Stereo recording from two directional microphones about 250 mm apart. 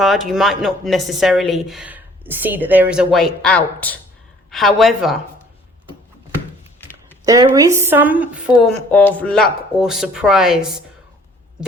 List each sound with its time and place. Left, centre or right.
0.0 s speech: centre
7.3 s speech: centre